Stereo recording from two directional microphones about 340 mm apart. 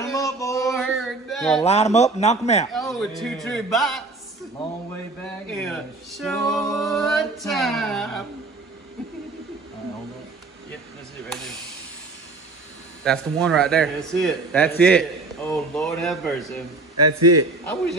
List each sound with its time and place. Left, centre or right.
0.0 s a sound: centre
1.6 s speech: centre
2.7 s male singing: centre
5.2 s male singing: centre
13.0 s male singing: centre
16.9 s a man's voice: right